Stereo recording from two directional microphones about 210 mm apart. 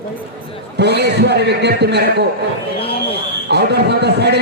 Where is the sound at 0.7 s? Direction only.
50° right (ahead or behind).